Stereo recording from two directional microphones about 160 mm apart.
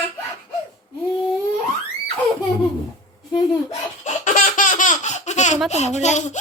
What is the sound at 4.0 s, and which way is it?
Laughter, 50° left (ahead or behind).